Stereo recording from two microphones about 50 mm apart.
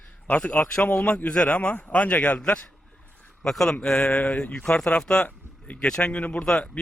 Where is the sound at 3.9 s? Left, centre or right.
Left.